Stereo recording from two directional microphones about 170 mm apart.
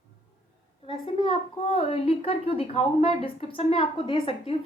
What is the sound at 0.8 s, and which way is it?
A woman's voice, 30° left (ahead or behind).